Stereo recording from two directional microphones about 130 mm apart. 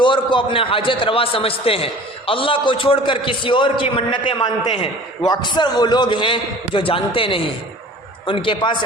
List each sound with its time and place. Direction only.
0.0 s a man's voice: 40° left (ahead or behind)